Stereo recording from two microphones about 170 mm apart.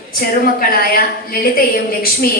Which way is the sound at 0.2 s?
60° left (ahead or behind).